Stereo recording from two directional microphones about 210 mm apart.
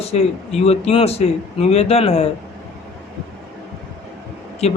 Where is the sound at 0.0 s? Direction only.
30° left (ahead or behind).